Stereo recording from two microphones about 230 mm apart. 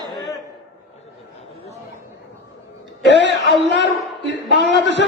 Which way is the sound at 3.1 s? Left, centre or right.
Left.